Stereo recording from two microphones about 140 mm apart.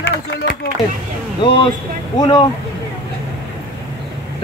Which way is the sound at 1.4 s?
35° left (ahead or behind).